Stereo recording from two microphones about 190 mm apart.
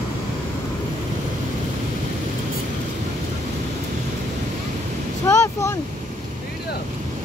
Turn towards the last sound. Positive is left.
turn(degrees=15)  # may be behind; listen again after turning